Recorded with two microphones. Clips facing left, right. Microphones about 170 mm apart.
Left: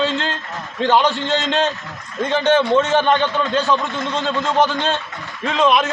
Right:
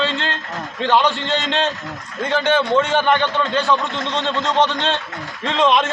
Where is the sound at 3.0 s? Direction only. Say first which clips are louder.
Left 1 dB; 15° left (ahead or behind).